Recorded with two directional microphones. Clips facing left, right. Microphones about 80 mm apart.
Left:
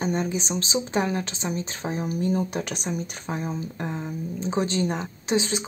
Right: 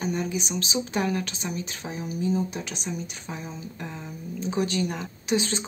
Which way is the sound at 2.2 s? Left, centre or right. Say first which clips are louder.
Even; left.